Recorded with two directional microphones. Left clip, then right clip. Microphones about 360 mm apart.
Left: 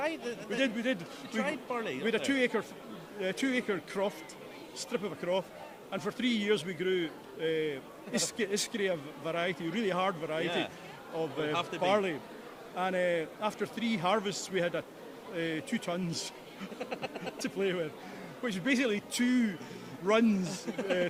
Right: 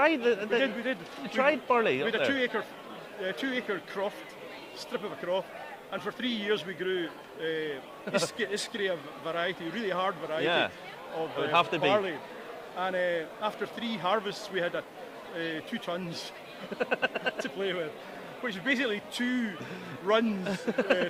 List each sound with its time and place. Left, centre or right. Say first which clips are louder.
0.0 s speech: right 10 dB; centre
0.6 s a man's voice: right 1 dB; left
1.3 s speech: right 9 dB; centre
2.0 s a man's voice: right 2 dB; left
10.4 s speech: right 6 dB; centre
11.9 s a man's voice: right 2 dB; left
16.8 s speech: right 10 dB; centre
17.3 s a man's voice: right 1 dB; left
20.7 s speech: right 6 dB; centre